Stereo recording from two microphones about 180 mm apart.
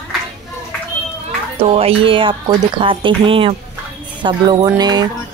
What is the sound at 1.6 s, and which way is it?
Speech, 30° right (ahead or behind).